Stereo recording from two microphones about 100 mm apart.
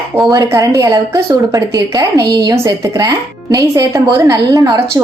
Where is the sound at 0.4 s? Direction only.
30° right (ahead or behind).